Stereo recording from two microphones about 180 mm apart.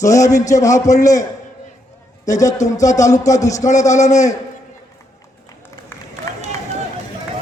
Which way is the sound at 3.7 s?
40° left (ahead or behind).